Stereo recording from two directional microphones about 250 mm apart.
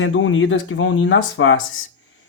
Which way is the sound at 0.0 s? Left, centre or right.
Left.